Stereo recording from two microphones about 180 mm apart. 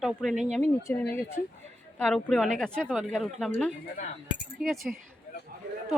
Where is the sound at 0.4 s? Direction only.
40° right (ahead or behind).